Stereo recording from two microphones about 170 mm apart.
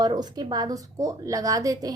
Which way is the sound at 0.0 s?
25° right (ahead or behind).